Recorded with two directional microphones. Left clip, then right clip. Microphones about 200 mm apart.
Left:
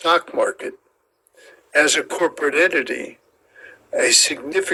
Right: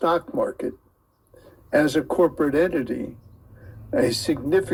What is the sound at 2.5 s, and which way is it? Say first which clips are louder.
Speech: left 5 dB; 45° left (ahead or behind).